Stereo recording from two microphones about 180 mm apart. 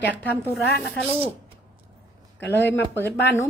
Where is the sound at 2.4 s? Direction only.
75° left (ahead or behind).